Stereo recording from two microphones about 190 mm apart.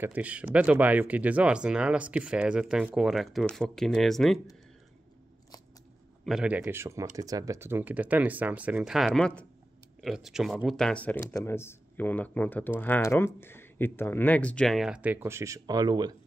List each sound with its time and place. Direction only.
0.0 s speech: 10° right (ahead or behind)
6.2 s speech: 5° right (ahead or behind); by 16.2 s 20° right (ahead or behind)